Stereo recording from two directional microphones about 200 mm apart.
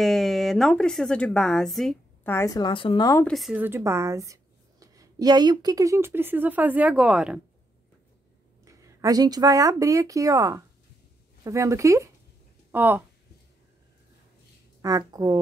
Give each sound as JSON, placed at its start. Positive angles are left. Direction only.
{"t": 0.0, "sound": "speech", "side_deg": 0}
{"t": 3.3, "sound": "speech", "side_deg": 0}
{"t": 8.6, "sound": "speech", "side_deg": -15}
{"t": 14.8, "sound": "speech", "side_deg": -20}